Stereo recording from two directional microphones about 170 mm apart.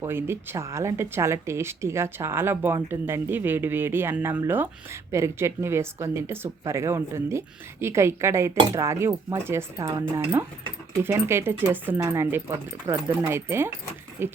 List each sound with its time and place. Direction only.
0.0 s speech: 15° right (ahead or behind)
11.0 s speech: 15° right (ahead or behind)